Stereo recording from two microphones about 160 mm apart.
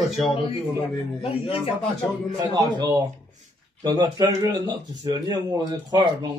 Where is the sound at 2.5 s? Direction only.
25° right (ahead or behind).